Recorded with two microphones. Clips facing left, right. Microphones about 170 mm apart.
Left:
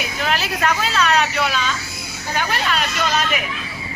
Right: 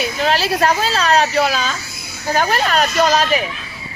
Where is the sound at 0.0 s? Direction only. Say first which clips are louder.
Right 5 dB; 30° right (ahead or behind).